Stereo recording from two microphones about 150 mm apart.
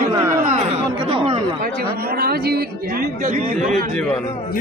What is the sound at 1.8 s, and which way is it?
Speech, 90° right.